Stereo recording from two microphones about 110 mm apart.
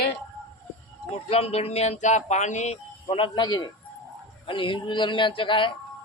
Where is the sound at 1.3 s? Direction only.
70° left (ahead or behind); by 2.8 s 90° left.